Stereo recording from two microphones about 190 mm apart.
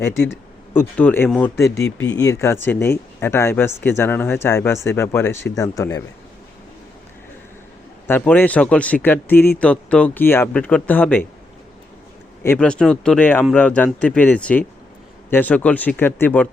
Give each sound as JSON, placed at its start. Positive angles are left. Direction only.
{"t": 0.0, "sound": "a man's voice", "side_deg": 15}
{"t": 8.0, "sound": "a man's voice", "side_deg": 10}
{"t": 12.4, "sound": "a man's voice", "side_deg": 10}